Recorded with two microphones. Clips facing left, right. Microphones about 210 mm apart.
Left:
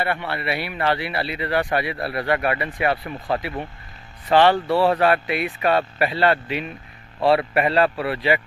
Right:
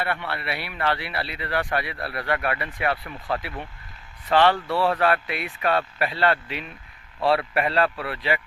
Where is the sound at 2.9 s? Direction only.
25° left (ahead or behind).